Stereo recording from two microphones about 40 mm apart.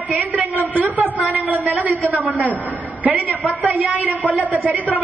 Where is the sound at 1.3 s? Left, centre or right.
Right.